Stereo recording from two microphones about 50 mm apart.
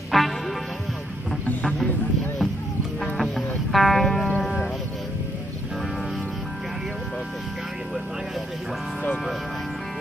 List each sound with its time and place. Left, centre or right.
0.1 s music: centre
1.5 s music: left
3.0 s music: centre